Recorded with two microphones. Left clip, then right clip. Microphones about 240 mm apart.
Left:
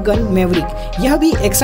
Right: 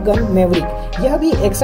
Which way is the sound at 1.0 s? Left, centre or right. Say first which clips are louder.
Left 1 dB; left.